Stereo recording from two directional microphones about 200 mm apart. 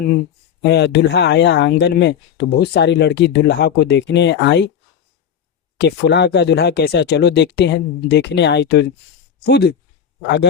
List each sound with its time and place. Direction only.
0.6 s speech: 55° left (ahead or behind)
5.7 s speech: 55° left (ahead or behind)